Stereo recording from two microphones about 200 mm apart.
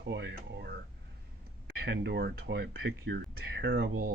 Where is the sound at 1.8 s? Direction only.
55° right (ahead or behind).